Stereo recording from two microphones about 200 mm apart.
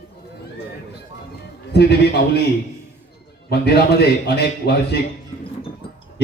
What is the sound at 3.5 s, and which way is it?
A man's voice, 55° left (ahead or behind).